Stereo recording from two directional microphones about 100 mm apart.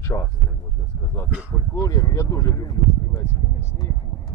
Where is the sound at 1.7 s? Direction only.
35° left (ahead or behind).